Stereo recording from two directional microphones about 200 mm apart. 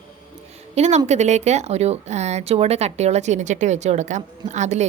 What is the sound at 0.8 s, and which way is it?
A woman's voice, 35° right (ahead or behind).